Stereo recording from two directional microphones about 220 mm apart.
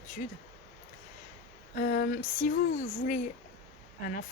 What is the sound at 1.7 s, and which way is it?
Speech, 40° left (ahead or behind).